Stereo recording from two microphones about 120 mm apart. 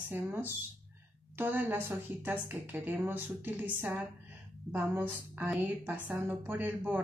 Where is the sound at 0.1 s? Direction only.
15° right (ahead or behind).